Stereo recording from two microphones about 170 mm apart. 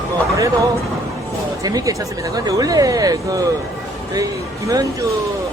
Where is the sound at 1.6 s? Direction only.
20° right (ahead or behind).